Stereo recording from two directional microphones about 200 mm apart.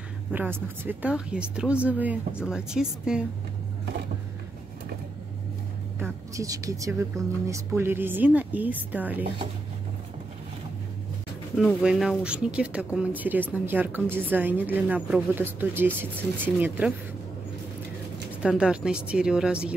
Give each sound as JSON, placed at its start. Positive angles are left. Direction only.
{"t": 0.3, "sound": "speech", "side_deg": -10}
{"t": 5.9, "sound": "a woman's voice", "side_deg": -15}
{"t": 11.5, "sound": "a woman's voice", "side_deg": -5}
{"t": 18.3, "sound": "speech", "side_deg": -5}